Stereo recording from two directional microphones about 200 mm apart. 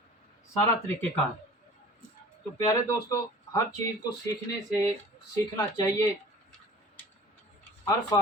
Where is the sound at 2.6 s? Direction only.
15° left (ahead or behind).